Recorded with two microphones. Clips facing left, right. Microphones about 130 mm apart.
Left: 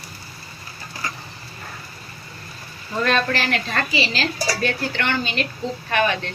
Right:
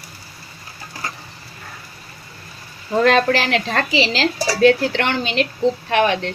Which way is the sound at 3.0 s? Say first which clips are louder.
Right 5 dB; 90° right.